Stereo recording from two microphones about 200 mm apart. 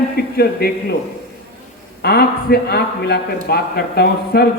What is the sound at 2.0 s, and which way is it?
A man's voice, 50° left (ahead or behind).